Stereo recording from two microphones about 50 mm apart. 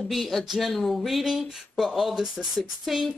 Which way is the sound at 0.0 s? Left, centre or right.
Centre.